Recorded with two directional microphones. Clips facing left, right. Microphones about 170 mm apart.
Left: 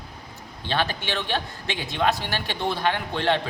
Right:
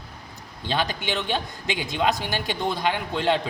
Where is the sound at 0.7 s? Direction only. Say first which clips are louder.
Even; 15° right (ahead or behind).